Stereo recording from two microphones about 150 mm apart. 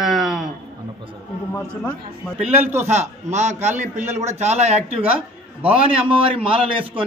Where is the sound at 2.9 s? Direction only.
50° right (ahead or behind).